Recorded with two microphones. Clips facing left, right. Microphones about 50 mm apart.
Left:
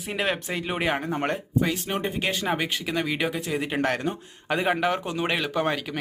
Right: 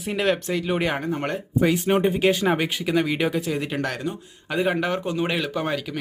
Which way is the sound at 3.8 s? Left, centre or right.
Left.